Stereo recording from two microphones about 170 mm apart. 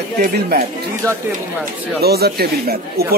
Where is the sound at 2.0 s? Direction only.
70° right (ahead or behind).